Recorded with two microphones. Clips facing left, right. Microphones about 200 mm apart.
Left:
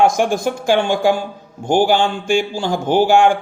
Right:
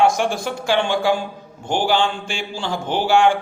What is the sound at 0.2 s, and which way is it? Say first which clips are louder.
Speech: left 5 dB; 45° left (ahead or behind).